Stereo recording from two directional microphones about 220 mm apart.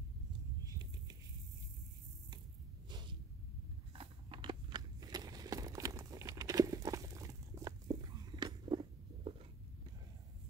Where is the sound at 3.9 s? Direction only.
25° right (ahead or behind).